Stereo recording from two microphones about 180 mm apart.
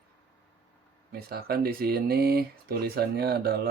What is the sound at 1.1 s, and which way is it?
Speech, 60° right (ahead or behind).